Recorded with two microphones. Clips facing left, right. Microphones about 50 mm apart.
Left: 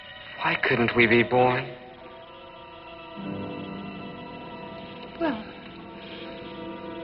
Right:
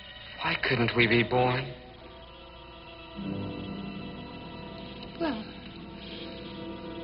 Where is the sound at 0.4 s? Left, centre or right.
Left.